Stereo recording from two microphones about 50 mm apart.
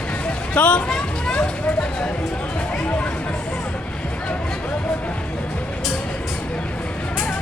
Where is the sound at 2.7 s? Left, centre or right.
Left.